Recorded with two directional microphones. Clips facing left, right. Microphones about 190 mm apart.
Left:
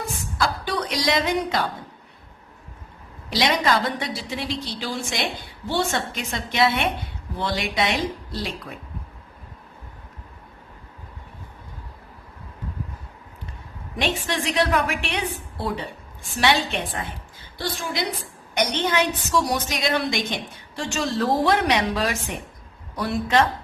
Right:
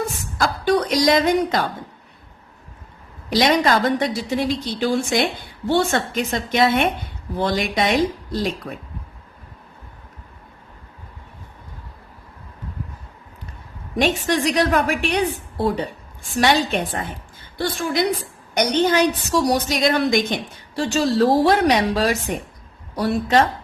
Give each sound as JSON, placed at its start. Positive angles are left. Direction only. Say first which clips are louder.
{"t": 0.3, "sound": "a woman's voice", "louder": "right 7 dB", "side_deg": -45}
{"t": 3.3, "sound": "a woman's voice", "louder": "right 4 dB", "side_deg": -50}
{"t": 13.9, "sound": "a woman's voice", "louder": "right 6 dB", "side_deg": -45}
{"t": 18.5, "sound": "a woman's voice", "louder": "right 5 dB", "side_deg": -40}
{"t": 20.7, "sound": "a woman's voice", "louder": "right 7 dB", "side_deg": -35}